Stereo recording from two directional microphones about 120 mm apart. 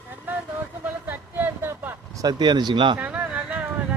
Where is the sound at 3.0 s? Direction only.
10° right (ahead or behind).